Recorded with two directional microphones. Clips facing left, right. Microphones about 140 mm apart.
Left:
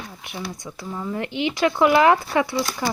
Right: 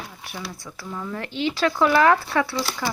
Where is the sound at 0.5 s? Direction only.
20° left (ahead or behind).